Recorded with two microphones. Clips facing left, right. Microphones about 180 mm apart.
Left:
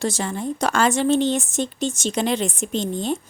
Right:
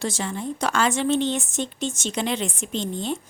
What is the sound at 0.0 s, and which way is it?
A woman's voice, 40° left (ahead or behind).